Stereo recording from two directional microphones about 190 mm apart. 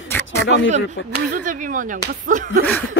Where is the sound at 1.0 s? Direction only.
85° left.